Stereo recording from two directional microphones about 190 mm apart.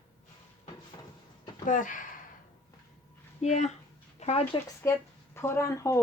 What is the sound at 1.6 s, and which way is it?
Speech, 45° left (ahead or behind).